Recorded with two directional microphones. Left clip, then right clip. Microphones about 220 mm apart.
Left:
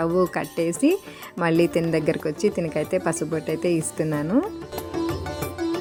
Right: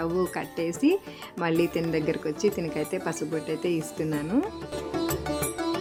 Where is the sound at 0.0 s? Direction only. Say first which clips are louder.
Left 6 dB; 20° left (ahead or behind).